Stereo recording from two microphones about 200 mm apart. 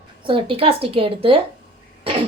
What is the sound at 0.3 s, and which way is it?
A woman's voice, 25° right (ahead or behind).